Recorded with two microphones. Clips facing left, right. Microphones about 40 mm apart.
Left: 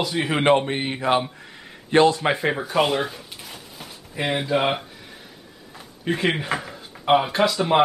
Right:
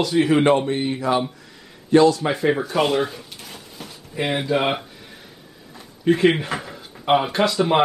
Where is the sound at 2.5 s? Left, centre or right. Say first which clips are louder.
Right 1 dB; centre.